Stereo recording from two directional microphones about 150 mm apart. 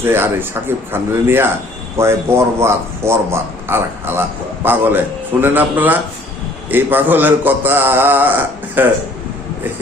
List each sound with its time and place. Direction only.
0.0 s a man's voice: 15° right (ahead or behind)